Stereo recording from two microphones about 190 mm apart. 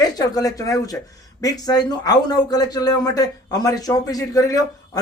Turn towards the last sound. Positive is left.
turn(degrees=20)  # may be behind; listen again after turning